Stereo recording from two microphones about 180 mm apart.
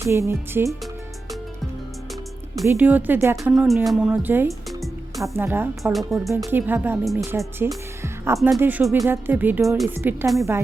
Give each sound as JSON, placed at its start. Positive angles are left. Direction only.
{"t": 0.0, "sound": "speech", "side_deg": -15}
{"t": 2.6, "sound": "speech", "side_deg": -10}
{"t": 5.8, "sound": "speech", "side_deg": 0}
{"t": 6.3, "sound": "speech", "side_deg": -10}
{"t": 7.0, "sound": "speech", "side_deg": 0}
{"t": 7.3, "sound": "speech", "side_deg": -10}
{"t": 8.0, "sound": "music", "side_deg": -15}
{"t": 8.5, "sound": "speech", "side_deg": -10}
{"t": 9.9, "sound": "speech", "side_deg": -10}